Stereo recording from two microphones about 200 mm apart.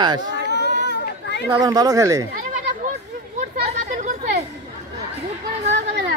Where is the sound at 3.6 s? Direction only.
35° right (ahead or behind).